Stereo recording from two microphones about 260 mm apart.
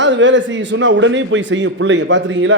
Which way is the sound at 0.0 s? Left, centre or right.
Right.